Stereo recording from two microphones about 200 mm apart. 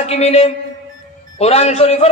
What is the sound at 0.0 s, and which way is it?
Speech, 30° left (ahead or behind).